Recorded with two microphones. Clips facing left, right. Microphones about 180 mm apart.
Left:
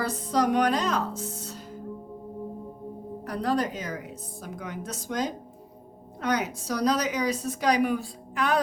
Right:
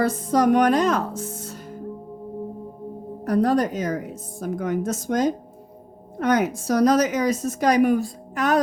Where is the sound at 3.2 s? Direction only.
45° right (ahead or behind).